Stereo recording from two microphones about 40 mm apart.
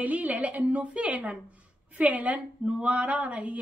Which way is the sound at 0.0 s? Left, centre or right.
Right.